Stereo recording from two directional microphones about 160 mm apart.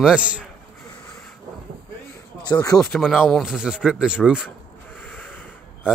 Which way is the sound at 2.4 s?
25° left (ahead or behind).